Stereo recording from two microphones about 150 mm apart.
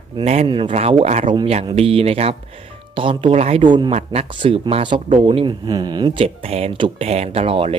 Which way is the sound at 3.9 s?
45° right (ahead or behind).